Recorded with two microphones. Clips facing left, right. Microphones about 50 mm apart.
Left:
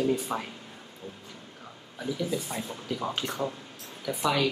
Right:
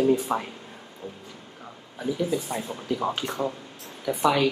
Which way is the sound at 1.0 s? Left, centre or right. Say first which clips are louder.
Right 4 dB; right.